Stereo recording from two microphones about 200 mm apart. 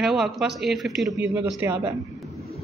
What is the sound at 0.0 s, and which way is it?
A woman's voice, centre (ahead or behind).